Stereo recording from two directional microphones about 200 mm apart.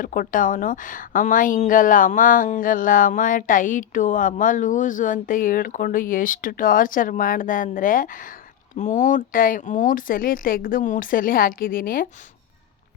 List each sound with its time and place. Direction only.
0.0 s a woman's voice: 45° left (ahead or behind)